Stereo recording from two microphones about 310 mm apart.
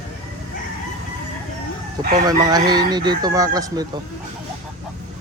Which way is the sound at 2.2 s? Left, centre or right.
Centre.